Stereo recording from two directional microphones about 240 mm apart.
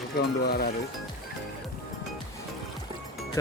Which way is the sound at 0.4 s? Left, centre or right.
Left.